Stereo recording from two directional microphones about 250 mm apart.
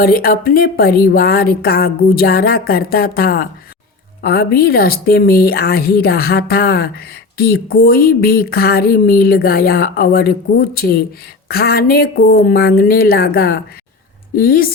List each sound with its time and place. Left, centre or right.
0.0 s speech: left